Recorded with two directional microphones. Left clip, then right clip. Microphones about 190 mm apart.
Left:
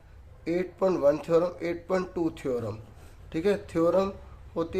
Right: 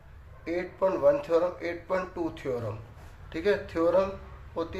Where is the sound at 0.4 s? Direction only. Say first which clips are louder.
Left 1 dB; 50° left (ahead or behind).